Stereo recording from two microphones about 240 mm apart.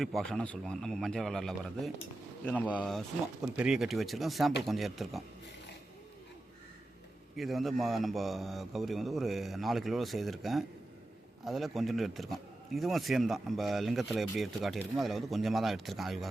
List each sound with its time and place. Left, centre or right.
0.0 s speech: centre
7.3 s speech: centre